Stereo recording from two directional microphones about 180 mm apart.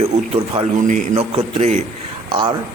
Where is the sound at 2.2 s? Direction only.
25° right (ahead or behind).